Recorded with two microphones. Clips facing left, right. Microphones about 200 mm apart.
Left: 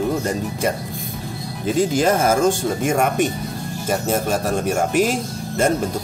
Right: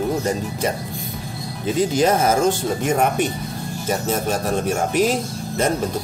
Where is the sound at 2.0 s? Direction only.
50° left (ahead or behind).